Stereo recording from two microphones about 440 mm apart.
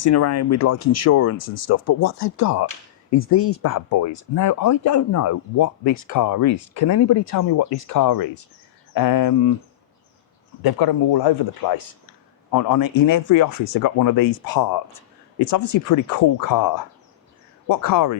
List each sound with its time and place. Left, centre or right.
0.0 s speech: left
10.6 s speech: left
12.5 s speech: left
15.9 s speech: left